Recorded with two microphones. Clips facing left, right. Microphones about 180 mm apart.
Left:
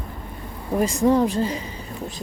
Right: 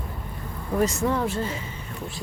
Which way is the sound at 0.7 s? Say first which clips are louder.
Left 5 dB; 15° left (ahead or behind).